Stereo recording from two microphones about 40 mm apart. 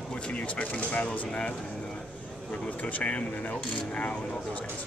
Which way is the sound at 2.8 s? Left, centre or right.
Left.